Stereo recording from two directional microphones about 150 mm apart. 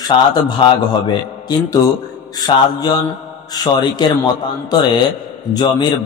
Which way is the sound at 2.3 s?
25° left (ahead or behind).